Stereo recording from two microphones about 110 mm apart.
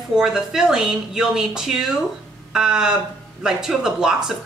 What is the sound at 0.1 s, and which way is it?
A woman's voice, 5° right (ahead or behind).